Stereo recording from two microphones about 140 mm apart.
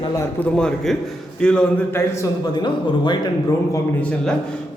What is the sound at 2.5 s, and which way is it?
Speech, 35° left (ahead or behind).